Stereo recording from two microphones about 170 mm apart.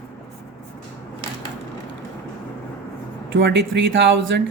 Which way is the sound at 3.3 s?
90° right.